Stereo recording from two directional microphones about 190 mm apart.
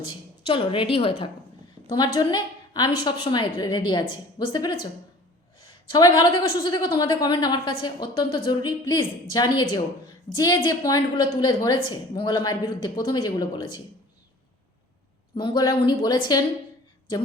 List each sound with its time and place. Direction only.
0.4 s a woman's voice: 30° left (ahead or behind)
5.9 s a woman's voice: 20° left (ahead or behind)
15.4 s a woman's voice: 25° left (ahead or behind)